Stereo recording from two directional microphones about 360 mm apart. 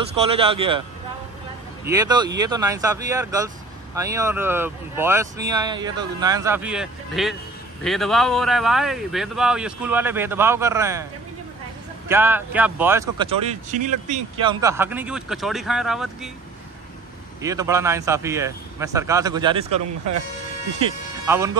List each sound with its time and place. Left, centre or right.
0.1 s speech: centre
1.9 s speech: centre
12.1 s speech: centre
17.4 s speech: centre
20.8 s speech: centre